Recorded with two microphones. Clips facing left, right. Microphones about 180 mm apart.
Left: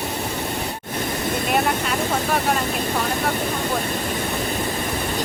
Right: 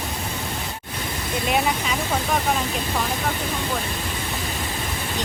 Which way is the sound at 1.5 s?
Centre (ahead or behind).